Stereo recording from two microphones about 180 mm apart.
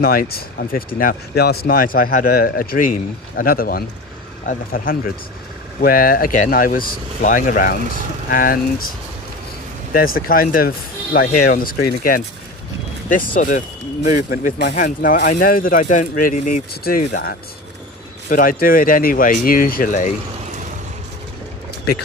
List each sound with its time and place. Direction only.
0.0 s speech: 55° left (ahead or behind)
9.9 s speech: 55° left (ahead or behind)
13.4 s speech: 45° left (ahead or behind)